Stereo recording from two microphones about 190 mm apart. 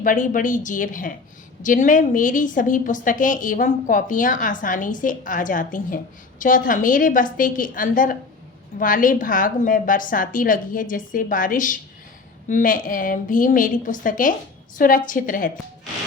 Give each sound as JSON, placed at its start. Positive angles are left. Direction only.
{"t": 0.0, "sound": "a woman's voice", "side_deg": 45}